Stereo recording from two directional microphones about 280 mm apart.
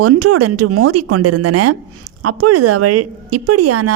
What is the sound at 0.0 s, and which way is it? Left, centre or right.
Speech, right.